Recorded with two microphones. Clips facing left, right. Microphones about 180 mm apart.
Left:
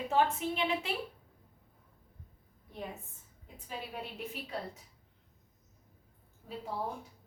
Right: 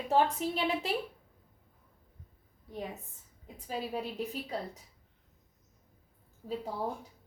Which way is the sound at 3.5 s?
35° right (ahead or behind).